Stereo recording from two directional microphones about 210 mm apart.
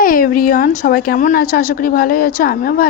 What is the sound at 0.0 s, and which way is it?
A woman's voice, 45° left (ahead or behind).